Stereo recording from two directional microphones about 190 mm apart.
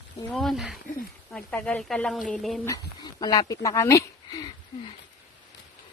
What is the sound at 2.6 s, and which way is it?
Speech, 20° left (ahead or behind).